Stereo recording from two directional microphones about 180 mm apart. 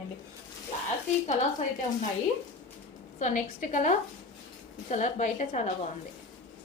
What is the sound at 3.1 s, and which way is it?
A woman's voice, 45° left (ahead or behind).